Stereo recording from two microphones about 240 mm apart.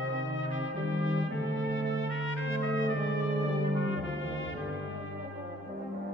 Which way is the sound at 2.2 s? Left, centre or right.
Left.